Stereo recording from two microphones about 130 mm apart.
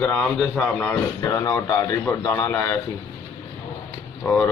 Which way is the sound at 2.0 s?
15° left (ahead or behind).